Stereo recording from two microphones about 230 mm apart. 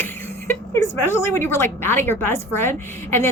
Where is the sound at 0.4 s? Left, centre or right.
Centre.